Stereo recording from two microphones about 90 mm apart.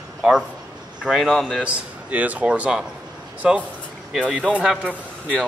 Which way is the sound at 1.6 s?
15° right (ahead or behind).